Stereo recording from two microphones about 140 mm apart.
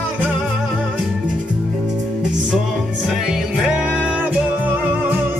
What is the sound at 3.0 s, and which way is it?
Music, 5° right (ahead or behind).